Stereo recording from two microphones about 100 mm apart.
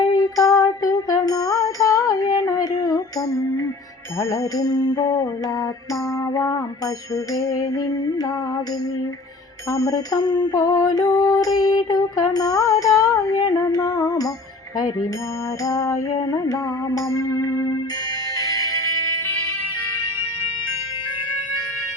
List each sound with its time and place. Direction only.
0.2 s music: 35° left (ahead or behind)
6.3 s music: 35° left (ahead or behind)
9.6 s music: 35° left (ahead or behind)
15.6 s music: 35° left (ahead or behind)